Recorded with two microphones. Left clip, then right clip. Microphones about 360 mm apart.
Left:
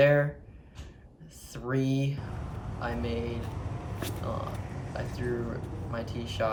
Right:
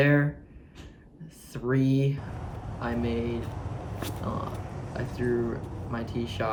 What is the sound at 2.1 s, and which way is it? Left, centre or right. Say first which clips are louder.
Speech: right 2 dB; centre.